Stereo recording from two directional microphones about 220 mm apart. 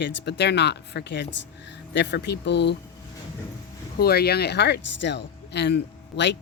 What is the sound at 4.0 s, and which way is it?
Speech, 45° left (ahead or behind).